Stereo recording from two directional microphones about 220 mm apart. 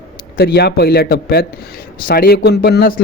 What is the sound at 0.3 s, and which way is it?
A man's voice, 45° left (ahead or behind).